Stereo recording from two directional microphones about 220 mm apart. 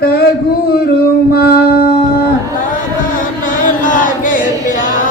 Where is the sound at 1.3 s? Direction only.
45° left (ahead or behind).